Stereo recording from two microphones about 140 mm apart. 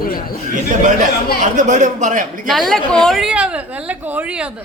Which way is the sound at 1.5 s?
60° right (ahead or behind).